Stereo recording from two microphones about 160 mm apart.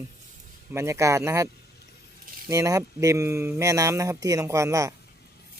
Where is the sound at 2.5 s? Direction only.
20° right (ahead or behind).